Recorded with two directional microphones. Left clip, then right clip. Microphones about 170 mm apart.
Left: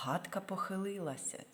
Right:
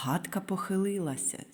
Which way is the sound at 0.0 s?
15° right (ahead or behind).